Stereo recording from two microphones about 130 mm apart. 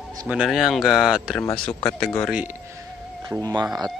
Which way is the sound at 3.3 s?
30° right (ahead or behind).